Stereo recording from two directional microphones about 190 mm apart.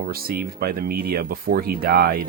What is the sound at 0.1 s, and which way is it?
Speech, 50° right (ahead or behind).